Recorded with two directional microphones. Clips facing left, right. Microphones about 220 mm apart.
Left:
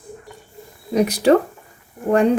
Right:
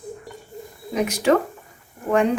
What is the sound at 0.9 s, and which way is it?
Speech, 35° left (ahead or behind).